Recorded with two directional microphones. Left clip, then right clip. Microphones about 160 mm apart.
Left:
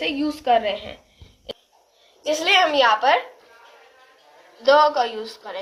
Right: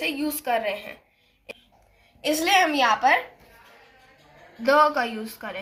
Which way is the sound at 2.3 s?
60° left (ahead or behind).